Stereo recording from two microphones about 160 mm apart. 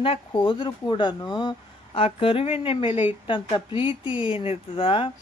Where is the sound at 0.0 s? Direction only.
35° left (ahead or behind).